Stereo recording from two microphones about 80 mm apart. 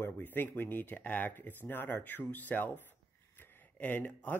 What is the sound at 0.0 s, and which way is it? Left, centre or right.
Speech, left.